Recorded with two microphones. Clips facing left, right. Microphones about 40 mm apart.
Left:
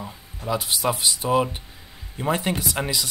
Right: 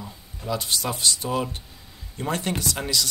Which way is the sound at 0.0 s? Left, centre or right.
Left.